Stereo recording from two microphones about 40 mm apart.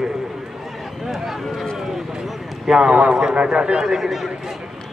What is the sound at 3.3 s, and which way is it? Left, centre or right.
Speech, right.